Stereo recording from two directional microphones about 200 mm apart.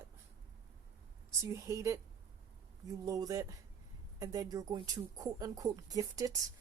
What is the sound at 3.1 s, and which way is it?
Speech, 15° right (ahead or behind).